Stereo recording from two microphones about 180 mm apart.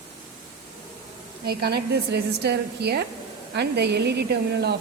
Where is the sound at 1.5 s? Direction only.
60° right (ahead or behind).